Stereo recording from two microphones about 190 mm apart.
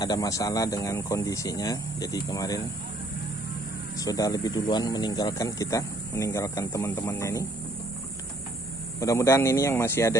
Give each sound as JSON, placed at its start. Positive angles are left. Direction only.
{"t": 0.0, "sound": "speech", "side_deg": 20}
{"t": 4.0, "sound": "speech", "side_deg": 20}
{"t": 9.0, "sound": "speech", "side_deg": 15}